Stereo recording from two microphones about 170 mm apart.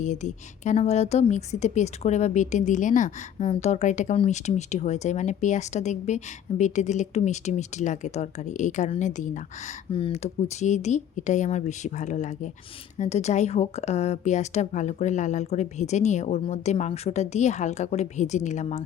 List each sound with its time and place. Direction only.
0.0 s speech: 45° left (ahead or behind)
9.9 s speech: 30° left (ahead or behind)
10.6 s speech: 45° left (ahead or behind)